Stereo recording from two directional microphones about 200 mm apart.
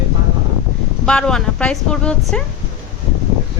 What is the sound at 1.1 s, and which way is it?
Speech, 5° left (ahead or behind).